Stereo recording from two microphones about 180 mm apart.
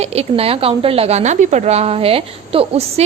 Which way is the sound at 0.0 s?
35° right (ahead or behind).